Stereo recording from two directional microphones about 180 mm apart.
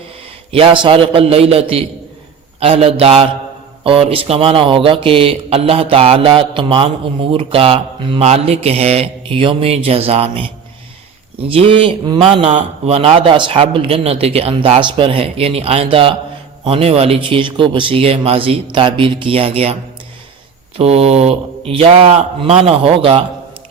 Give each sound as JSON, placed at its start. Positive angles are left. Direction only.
{"t": 0.5, "sound": "speech", "side_deg": -30}
{"t": 12.5, "sound": "speech", "side_deg": -40}
{"t": 20.7, "sound": "speech", "side_deg": -35}